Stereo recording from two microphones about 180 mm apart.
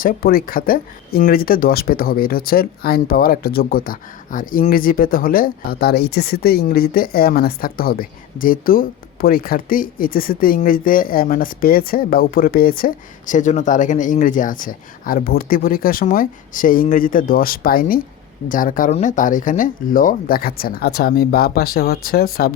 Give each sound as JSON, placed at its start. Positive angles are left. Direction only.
{"t": 0.0, "sound": "speech", "side_deg": 55}